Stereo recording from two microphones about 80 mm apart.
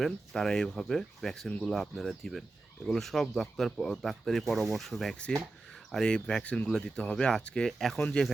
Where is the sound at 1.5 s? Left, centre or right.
Centre.